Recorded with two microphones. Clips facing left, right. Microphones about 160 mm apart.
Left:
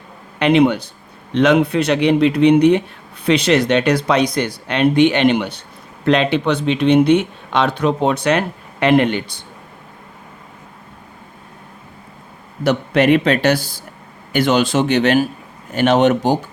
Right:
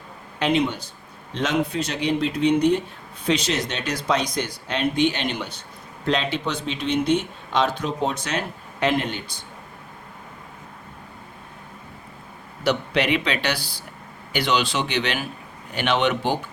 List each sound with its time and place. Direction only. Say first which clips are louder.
0.3 s a man's voice: left 9 dB; 70° left (ahead or behind)
12.6 s speech: left 8 dB; 50° left (ahead or behind)